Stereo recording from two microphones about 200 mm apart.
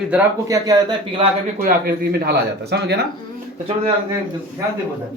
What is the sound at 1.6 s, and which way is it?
Speech, 45° right (ahead or behind).